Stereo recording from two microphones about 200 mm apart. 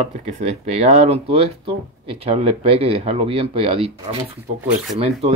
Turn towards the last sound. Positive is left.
turn(degrees=-30)  # may be behind; listen again after turning